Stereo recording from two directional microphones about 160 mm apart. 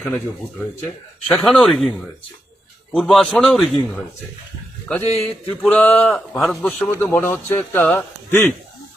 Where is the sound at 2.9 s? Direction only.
5° left (ahead or behind).